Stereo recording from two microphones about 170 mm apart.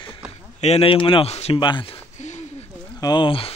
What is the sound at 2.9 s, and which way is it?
Speech, 25° left (ahead or behind).